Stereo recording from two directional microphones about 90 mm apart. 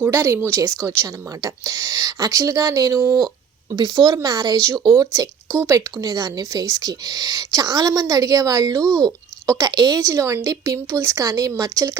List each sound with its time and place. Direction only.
0.0 s speech: 30° right (ahead or behind)
3.0 s speech: 30° right (ahead or behind)
3.7 s speech: 45° right (ahead or behind)
6.0 s a woman's voice: 45° right (ahead or behind)